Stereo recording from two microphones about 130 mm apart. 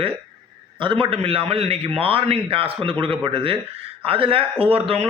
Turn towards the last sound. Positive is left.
turn(degrees=-50)  # may be behind; listen again after turning